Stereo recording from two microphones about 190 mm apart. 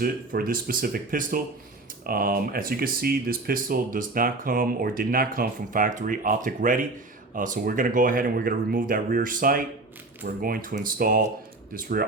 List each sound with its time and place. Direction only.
0.0 s speech: 50° right (ahead or behind)